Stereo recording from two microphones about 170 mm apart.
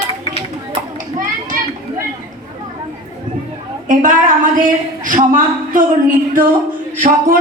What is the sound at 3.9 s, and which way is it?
A woman's voice, 50° right (ahead or behind).